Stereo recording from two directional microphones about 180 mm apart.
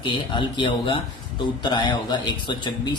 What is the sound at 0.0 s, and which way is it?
A man's voice, 25° left (ahead or behind).